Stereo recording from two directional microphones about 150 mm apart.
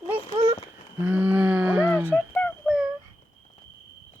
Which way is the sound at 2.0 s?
10° left (ahead or behind).